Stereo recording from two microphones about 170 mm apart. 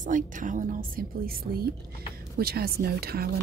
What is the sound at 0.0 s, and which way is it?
A woman's voice, 50° right (ahead or behind).